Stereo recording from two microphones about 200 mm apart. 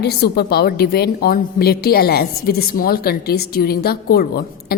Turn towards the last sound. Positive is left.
turn(degrees=50)  # may be behind; listen again after turning